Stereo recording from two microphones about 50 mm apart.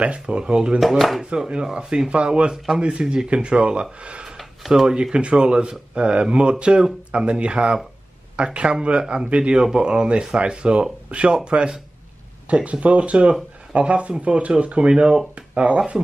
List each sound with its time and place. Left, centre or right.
0.0 s speech: right
0.7 s speech: centre
1.3 s speech: centre
4.4 s a sound: centre
4.9 s speech: centre